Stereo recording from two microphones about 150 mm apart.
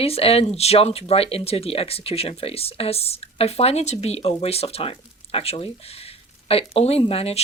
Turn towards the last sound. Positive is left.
turn(degrees=40)  # may be behind; listen again after turning